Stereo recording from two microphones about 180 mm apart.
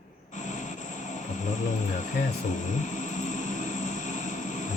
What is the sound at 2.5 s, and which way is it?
Vehicle, 45° left (ahead or behind).